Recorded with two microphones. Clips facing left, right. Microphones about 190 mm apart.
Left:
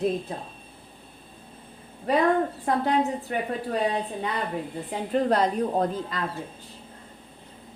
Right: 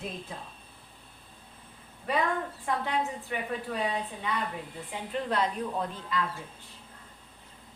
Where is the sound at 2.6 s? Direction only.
40° left (ahead or behind).